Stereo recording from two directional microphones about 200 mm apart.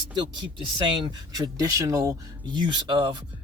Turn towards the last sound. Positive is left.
turn(degrees=-25)  # may be behind; listen again after turning